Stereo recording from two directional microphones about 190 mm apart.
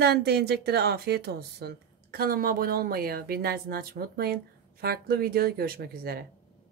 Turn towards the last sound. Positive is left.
turn(degrees=-55)  # may be behind; listen again after turning